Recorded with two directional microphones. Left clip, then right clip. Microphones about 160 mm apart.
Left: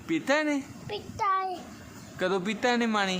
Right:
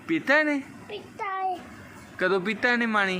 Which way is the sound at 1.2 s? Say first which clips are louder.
Left 3 dB; 25° left (ahead or behind).